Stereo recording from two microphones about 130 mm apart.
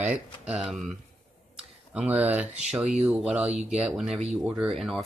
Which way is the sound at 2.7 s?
5° right (ahead or behind).